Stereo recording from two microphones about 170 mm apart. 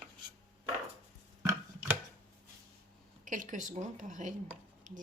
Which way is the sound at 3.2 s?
50° right (ahead or behind).